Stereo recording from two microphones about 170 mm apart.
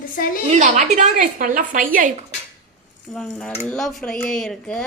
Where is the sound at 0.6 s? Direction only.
45° right (ahead or behind).